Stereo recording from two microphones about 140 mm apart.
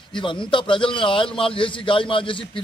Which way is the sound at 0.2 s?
35° left (ahead or behind).